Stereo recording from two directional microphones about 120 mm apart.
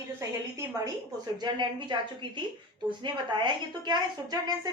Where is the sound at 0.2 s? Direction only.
25° right (ahead or behind).